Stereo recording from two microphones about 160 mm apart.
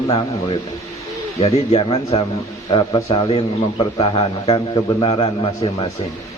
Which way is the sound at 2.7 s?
25° left (ahead or behind).